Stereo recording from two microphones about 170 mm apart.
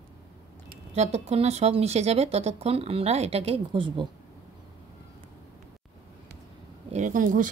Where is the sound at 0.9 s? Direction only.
40° right (ahead or behind).